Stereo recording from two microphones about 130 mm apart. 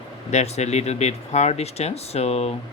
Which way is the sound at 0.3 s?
60° left (ahead or behind).